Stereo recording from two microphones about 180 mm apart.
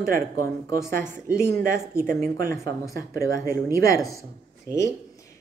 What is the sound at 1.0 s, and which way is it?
Speech, 15° left (ahead or behind).